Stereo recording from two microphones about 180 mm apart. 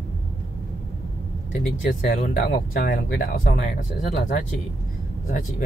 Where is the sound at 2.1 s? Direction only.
45° left (ahead or behind).